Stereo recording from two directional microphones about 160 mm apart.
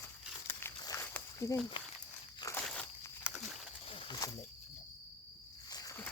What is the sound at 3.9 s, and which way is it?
Wild animals, 35° left (ahead or behind).